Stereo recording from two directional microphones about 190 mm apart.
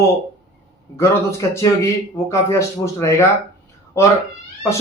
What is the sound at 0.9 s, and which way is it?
A man's voice, 15° left (ahead or behind).